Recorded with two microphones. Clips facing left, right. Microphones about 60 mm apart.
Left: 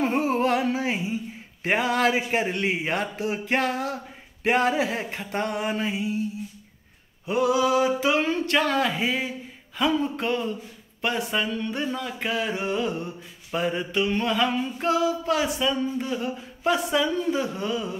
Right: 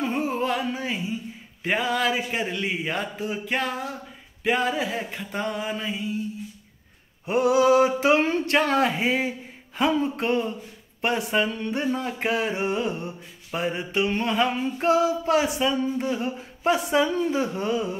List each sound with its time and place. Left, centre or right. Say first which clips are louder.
0.2 s music: left 3 dB; left
1.6 s speech: left 2 dB; left
7.2 s a sound: right 3 dB; right